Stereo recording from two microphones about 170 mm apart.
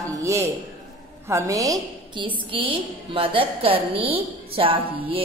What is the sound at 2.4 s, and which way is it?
A woman's voice, 30° right (ahead or behind).